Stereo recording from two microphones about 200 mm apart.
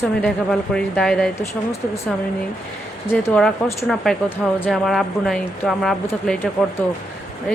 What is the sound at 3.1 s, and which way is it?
A woman's voice, 10° left (ahead or behind).